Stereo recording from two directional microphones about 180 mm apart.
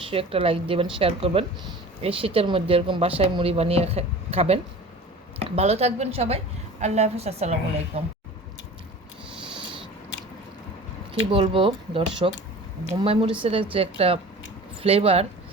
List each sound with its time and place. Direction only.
0.1 s speech: 30° right (ahead or behind)
11.1 s speech: 30° right (ahead or behind)